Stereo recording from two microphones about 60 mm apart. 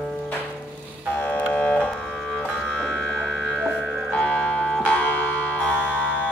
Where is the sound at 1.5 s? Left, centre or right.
Left.